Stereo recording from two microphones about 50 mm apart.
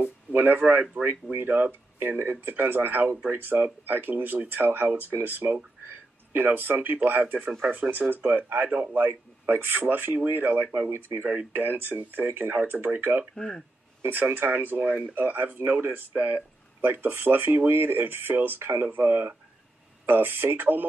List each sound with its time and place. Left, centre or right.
0.3 s speech: right
10.9 s speech: right
11.5 s speech: right
13.3 s speech: centre
14.0 s speech: right